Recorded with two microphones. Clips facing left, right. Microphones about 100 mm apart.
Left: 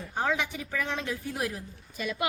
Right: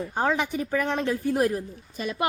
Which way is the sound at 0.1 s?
40° right (ahead or behind).